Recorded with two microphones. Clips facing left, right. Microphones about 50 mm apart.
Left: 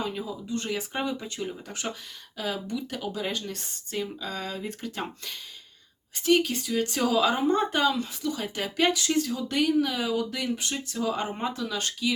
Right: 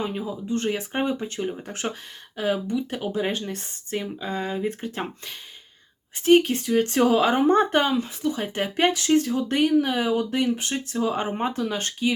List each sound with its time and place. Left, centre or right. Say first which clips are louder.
0.0 s speech: right 3 dB; right
6.2 s speech: right 6 dB; right